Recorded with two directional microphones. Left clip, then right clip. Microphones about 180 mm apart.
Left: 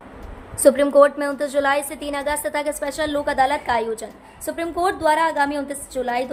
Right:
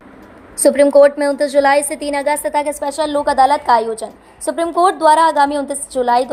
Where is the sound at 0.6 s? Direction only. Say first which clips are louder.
Right 5 dB; 25° right (ahead or behind).